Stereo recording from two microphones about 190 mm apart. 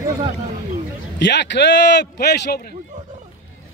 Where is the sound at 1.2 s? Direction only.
65° left (ahead or behind).